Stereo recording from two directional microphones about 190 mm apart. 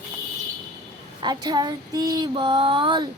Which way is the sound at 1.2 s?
20° right (ahead or behind).